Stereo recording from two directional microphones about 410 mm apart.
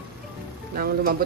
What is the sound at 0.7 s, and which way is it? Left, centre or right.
Speech, right.